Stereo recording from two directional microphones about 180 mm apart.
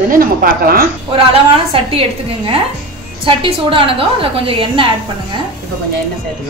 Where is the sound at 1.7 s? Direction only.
30° right (ahead or behind).